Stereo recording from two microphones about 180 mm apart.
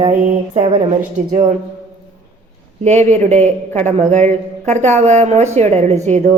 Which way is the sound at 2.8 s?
40° right (ahead or behind).